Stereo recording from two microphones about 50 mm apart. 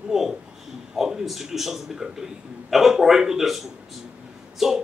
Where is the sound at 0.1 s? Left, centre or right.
Centre.